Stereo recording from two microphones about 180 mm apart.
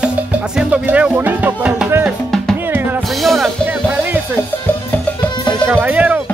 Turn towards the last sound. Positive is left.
turn(degrees=-10)  # may be behind; listen again after turning